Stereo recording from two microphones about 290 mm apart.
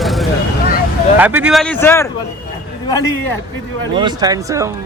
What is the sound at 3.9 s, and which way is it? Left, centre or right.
Speech, centre.